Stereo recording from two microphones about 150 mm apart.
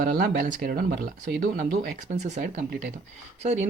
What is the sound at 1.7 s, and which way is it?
Speech, 60° right (ahead or behind).